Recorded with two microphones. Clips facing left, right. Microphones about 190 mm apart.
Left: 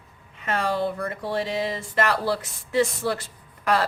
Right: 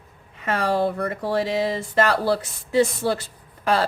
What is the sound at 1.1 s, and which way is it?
A woman's voice, 40° right (ahead or behind).